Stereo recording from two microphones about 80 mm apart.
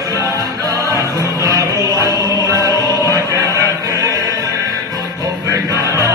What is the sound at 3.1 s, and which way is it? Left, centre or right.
Music, right.